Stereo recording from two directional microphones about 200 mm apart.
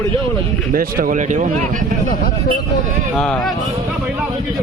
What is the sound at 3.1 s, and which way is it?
Speech, 5° left (ahead or behind).